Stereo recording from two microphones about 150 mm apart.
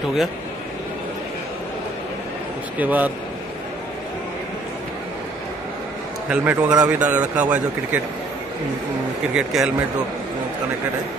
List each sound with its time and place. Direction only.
2.8 s speech: 10° right (ahead or behind)
6.2 s speech: 10° right (ahead or behind)
9.3 s a man's voice: 5° right (ahead or behind)